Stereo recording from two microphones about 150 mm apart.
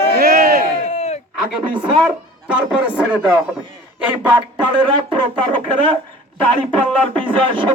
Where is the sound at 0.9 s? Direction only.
45° left (ahead or behind).